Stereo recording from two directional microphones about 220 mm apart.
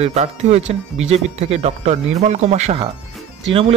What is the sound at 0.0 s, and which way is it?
Speech, 30° right (ahead or behind).